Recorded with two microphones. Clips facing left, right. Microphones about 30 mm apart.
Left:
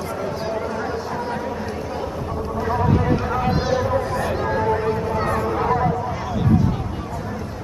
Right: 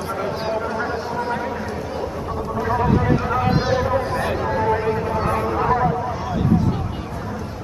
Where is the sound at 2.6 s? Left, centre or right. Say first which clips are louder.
Right 1 dB; centre.